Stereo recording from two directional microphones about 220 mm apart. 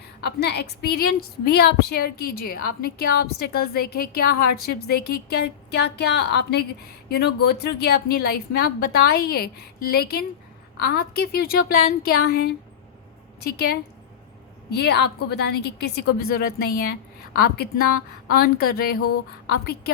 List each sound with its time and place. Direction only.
0.2 s a woman's voice: 50° left (ahead or behind)